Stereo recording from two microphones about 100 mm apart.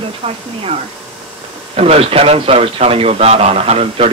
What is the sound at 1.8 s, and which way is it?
Speech, 85° right.